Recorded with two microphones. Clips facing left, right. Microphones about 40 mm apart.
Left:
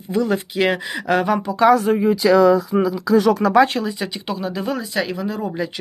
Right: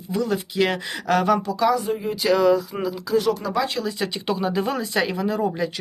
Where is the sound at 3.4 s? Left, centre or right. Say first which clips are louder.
Left 10 dB; left.